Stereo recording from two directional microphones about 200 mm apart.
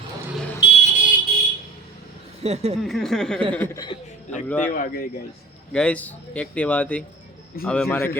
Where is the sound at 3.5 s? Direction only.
15° left (ahead or behind).